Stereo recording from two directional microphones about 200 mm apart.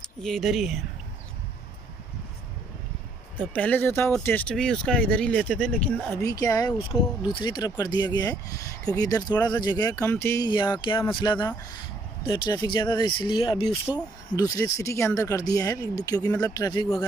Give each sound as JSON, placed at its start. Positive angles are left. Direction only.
{"t": 0.2, "sound": "speech", "side_deg": 0}
{"t": 3.5, "sound": "speech", "side_deg": 10}